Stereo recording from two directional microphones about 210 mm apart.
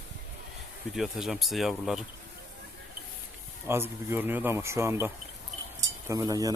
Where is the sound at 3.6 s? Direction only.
10° right (ahead or behind).